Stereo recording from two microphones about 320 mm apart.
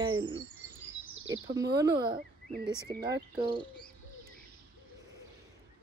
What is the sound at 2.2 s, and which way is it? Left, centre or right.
Bird, right.